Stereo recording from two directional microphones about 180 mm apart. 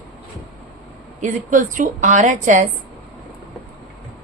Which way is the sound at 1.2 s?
45° right (ahead or behind).